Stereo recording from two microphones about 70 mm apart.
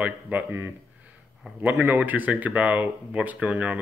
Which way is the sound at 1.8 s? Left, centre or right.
Right.